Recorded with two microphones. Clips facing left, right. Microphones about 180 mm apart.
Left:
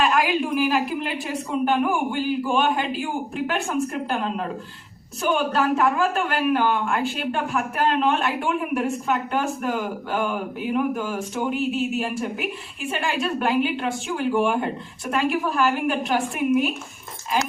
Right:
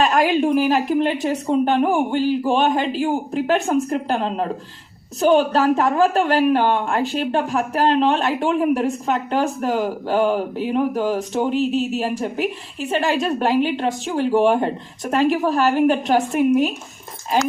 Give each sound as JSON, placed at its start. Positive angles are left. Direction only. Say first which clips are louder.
{"t": 0.0, "sound": "a woman's voice", "louder": "right 4 dB", "side_deg": -40}